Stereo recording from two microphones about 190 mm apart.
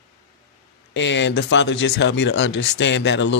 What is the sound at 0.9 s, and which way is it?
Speech, 70° left (ahead or behind).